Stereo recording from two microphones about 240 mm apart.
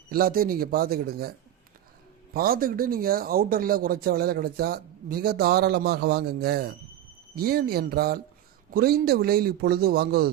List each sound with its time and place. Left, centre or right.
0.1 s speech: right
2.3 s speech: right